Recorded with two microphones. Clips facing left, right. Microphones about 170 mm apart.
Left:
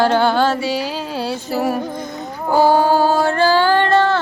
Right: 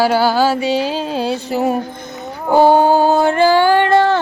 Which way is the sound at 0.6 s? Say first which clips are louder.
Right 4 dB; 20° right (ahead or behind).